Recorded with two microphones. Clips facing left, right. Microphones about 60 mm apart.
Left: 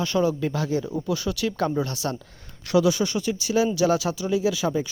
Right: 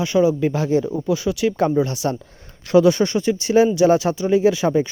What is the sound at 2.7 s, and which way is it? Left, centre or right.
Speech, right.